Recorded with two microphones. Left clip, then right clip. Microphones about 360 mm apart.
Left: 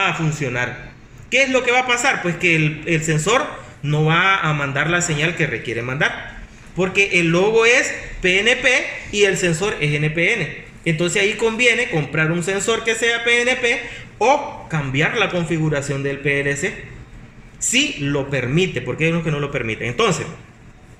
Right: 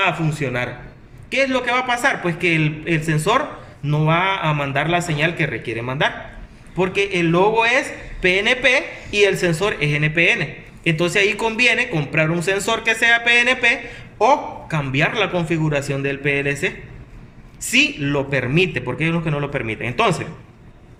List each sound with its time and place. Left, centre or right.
0.0 s a man's voice: right